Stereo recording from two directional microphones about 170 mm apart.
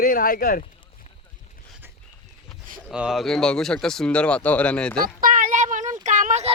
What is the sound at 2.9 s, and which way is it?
Speech, 5° right (ahead or behind).